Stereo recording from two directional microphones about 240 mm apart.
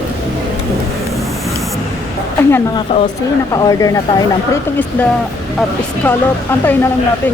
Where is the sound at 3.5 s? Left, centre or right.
Centre.